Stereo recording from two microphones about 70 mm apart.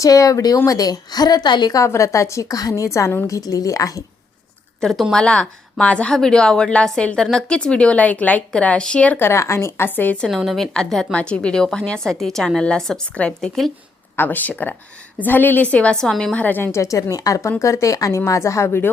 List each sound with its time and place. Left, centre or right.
0.0 s a woman's voice: left
1.8 s a woman's voice: left
4.8 s speech: centre
5.1 s a woman's voice: centre
9.1 s a woman's voice: left
9.4 s a woman's voice: left
10.2 s a woman's voice: centre
11.1 s a woman's voice: centre
14.2 s a woman's voice: left; by 16.3 s centre
16.3 s a woman's voice: left
16.7 s a woman's voice: left